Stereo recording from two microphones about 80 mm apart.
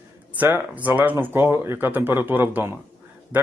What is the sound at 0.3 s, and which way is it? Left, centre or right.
Speech, right.